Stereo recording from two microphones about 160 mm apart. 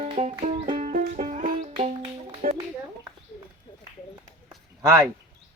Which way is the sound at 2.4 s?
60° right (ahead or behind).